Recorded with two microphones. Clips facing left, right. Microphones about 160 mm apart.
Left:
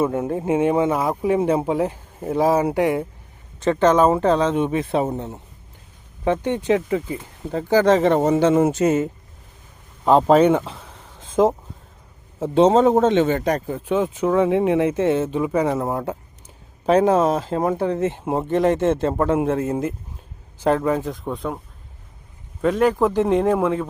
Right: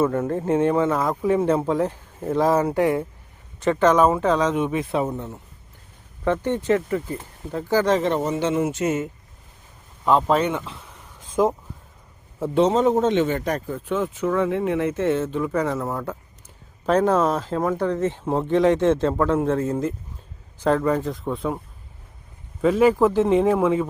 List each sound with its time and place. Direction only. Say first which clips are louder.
0.0 s speech: even; 15° left (ahead or behind)
3.6 s speech: left 1 dB; 25° left (ahead or behind)
7.8 s speech: left 4 dB; 90° left
8.0 s a man's voice: left 6 dB; 45° left (ahead or behind)
11.2 s a sound: left 3 dB; 25° left (ahead or behind)
12.5 s a man's voice: left 4 dB; 30° left (ahead or behind)
13.7 s speech: left 4 dB; 15° left (ahead or behind); by 21.6 s centre (ahead or behind)
22.6 s speech: right 1 dB; 5° right (ahead or behind)